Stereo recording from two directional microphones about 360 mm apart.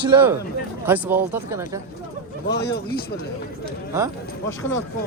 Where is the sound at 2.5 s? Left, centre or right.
Left.